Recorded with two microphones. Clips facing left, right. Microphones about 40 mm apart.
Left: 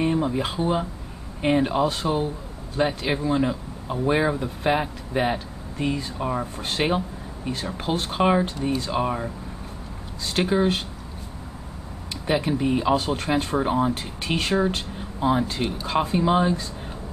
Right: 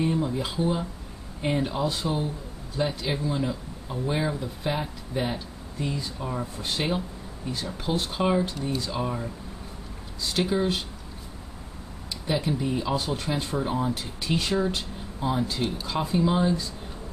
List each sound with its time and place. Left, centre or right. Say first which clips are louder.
0.0 s speech: left 3 dB; left
12.3 s speech: left 4 dB; left
14.7 s a sound: left 3 dB; left
15.9 s speech: left 5 dB; left